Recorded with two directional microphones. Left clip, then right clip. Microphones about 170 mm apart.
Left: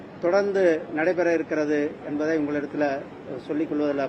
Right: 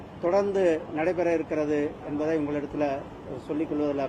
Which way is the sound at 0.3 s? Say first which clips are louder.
Left 3 dB; 35° right (ahead or behind).